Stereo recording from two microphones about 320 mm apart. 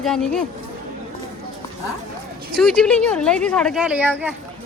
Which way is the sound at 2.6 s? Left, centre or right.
Centre.